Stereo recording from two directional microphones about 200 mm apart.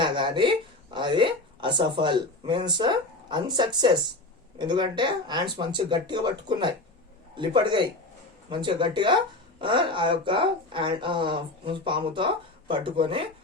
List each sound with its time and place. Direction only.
0.0 s speech: 25° right (ahead or behind)